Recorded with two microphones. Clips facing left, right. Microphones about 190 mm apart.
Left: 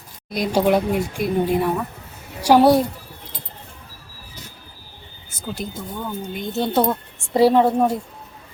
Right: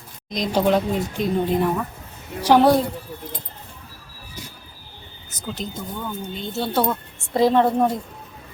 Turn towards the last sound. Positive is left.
turn(degrees=10)  # may be behind; listen again after turning